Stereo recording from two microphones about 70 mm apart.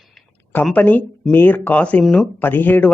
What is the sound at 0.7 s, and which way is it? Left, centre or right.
Speech, left.